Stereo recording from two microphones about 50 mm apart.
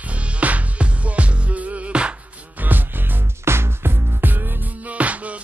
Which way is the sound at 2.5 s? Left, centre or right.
Right.